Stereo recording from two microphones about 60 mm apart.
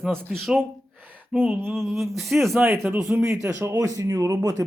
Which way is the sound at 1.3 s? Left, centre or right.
Right.